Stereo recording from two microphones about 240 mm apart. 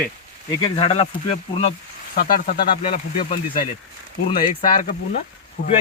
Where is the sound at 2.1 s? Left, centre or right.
Left.